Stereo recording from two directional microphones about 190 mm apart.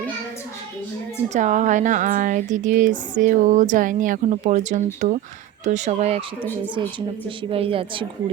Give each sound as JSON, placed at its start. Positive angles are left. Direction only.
{"t": 1.3, "sound": "speech", "side_deg": -40}
{"t": 7.3, "sound": "speech", "side_deg": -30}